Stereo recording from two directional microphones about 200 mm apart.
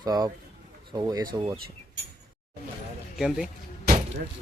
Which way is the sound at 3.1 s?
Centre (ahead or behind).